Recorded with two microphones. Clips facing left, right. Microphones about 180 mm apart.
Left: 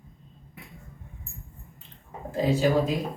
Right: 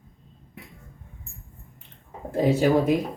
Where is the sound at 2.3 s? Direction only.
60° right (ahead or behind).